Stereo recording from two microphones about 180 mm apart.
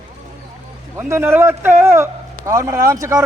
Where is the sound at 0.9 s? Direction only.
15° right (ahead or behind).